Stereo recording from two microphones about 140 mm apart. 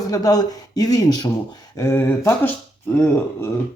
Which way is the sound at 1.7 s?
20° left (ahead or behind).